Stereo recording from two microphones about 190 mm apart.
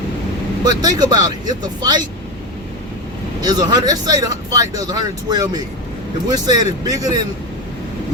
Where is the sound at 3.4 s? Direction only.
20° right (ahead or behind).